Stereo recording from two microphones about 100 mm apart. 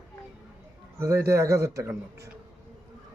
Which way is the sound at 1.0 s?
30° right (ahead or behind).